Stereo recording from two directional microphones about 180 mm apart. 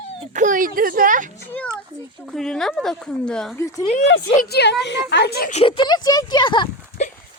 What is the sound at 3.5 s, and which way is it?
Speech, 15° left (ahead or behind).